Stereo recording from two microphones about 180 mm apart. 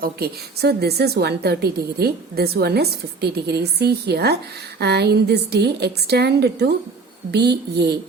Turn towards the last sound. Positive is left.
turn(degrees=-70)  # may be behind; listen again after turning